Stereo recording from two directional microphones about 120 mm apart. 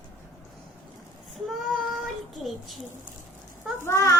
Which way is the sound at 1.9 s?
Centre (ahead or behind).